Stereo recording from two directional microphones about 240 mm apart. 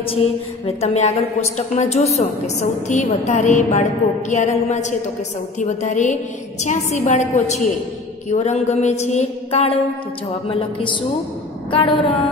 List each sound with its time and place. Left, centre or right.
0.0 s a woman's voice: left